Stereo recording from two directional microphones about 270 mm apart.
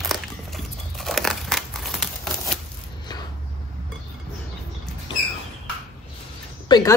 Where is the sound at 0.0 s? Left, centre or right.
Centre.